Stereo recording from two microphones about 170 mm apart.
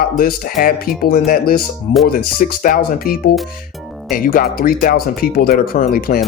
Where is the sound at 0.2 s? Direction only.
55° left (ahead or behind).